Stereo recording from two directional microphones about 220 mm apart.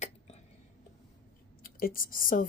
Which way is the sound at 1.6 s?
40° left (ahead or behind).